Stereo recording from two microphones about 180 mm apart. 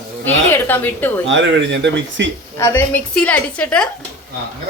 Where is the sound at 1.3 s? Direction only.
90° right.